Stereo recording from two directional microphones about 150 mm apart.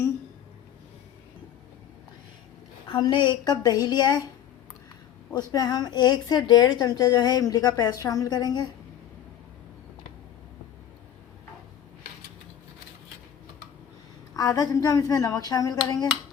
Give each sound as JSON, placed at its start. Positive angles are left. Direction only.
{"t": 2.8, "sound": "a woman's voice", "side_deg": 35}
{"t": 5.3, "sound": "a woman's voice", "side_deg": 25}
{"t": 14.3, "sound": "a woman's voice", "side_deg": 25}